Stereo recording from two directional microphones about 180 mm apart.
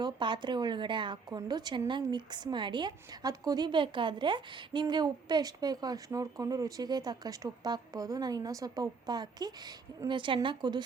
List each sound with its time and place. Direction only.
0.0 s a woman's voice: 25° right (ahead or behind)